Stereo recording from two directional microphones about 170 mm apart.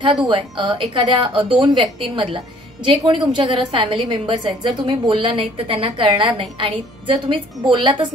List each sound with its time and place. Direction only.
0.3 s a woman's voice: 30° right (ahead or behind)